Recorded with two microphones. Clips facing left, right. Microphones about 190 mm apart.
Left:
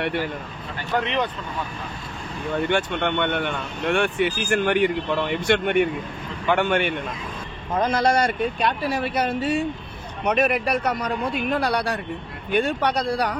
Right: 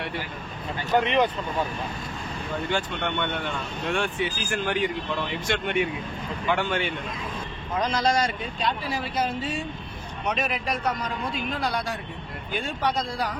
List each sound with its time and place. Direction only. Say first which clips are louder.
2.7 s a man's voice: left 3 dB; 65° left (ahead or behind)